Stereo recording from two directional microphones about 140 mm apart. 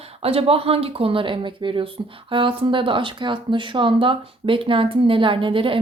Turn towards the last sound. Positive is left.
turn(degrees=-40)  # may be behind; listen again after turning